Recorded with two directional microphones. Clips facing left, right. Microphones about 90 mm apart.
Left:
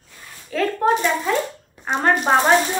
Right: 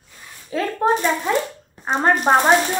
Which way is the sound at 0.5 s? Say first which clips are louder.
Even; 20° right (ahead or behind).